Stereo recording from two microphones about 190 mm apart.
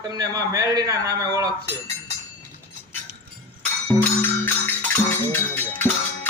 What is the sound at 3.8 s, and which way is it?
Music, 10° left (ahead or behind).